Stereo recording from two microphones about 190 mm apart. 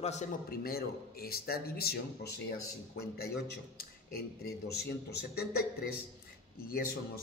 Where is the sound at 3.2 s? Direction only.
55° left (ahead or behind).